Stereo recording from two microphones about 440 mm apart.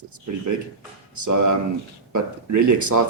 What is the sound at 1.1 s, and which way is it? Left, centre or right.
Speech, right.